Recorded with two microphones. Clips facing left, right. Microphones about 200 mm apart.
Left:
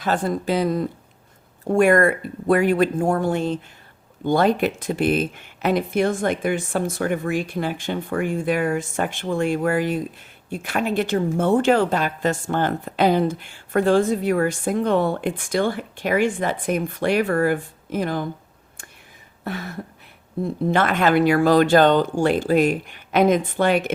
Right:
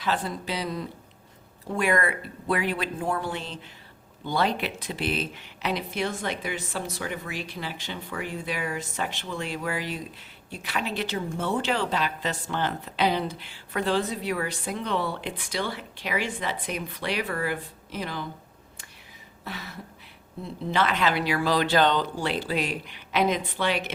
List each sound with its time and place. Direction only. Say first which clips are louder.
0.0 s speech: left 7 dB; 45° left (ahead or behind)
19.5 s speech: left 9 dB; 50° left (ahead or behind)